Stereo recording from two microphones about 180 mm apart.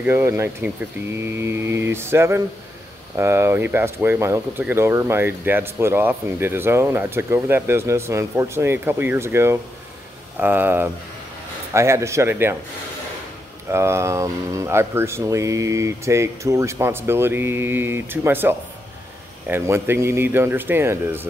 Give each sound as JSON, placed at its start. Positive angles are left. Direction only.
{"t": 0.0, "sound": "speech", "side_deg": -15}
{"t": 13.7, "sound": "speech", "side_deg": -15}